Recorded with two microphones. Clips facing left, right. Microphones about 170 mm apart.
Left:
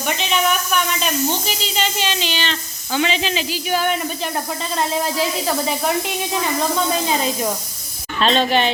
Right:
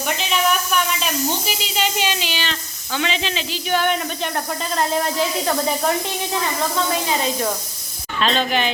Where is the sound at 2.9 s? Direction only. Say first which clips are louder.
Left 3 dB; 5° left (ahead or behind).